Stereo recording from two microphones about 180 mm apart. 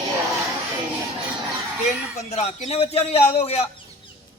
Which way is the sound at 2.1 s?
40° left (ahead or behind).